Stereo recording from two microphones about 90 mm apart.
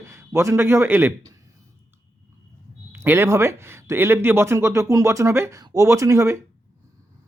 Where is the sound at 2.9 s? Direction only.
25° right (ahead or behind).